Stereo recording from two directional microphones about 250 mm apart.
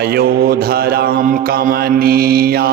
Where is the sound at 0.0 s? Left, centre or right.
Right.